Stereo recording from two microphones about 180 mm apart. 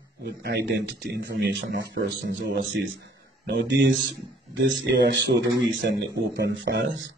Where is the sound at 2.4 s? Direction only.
75° right (ahead or behind).